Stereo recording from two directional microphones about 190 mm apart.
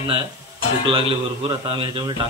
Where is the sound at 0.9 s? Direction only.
25° right (ahead or behind).